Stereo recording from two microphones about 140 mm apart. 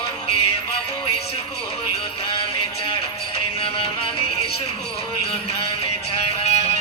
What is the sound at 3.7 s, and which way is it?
Music, 40° left (ahead or behind).